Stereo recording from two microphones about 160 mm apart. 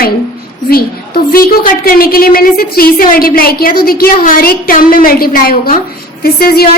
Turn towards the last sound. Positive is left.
turn(degrees=70)  # may be behind; listen again after turning